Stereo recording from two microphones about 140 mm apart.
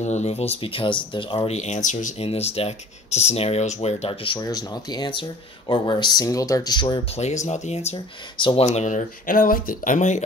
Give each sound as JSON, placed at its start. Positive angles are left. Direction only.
{"t": 0.0, "sound": "speech", "side_deg": 55}
{"t": 1.6, "sound": "speech", "side_deg": 60}
{"t": 2.1, "sound": "speech", "side_deg": 45}
{"t": 4.4, "sound": "speech", "side_deg": 25}
{"t": 7.4, "sound": "speech", "side_deg": 55}
{"t": 8.4, "sound": "speech", "side_deg": 35}
{"t": 8.6, "sound": "speech", "side_deg": 60}